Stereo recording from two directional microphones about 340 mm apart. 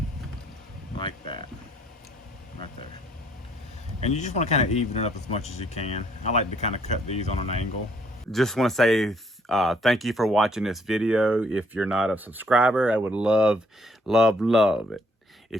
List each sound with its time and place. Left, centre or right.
0.9 s a sound: centre
4.0 s speech: centre
8.3 s speech: centre